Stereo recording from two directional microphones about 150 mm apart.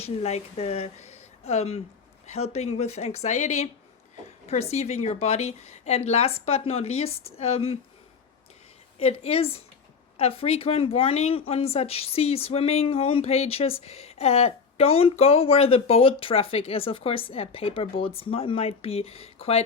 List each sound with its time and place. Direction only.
0.0 s a woman's voice: 45° left (ahead or behind)
9.0 s speech: 40° left (ahead or behind)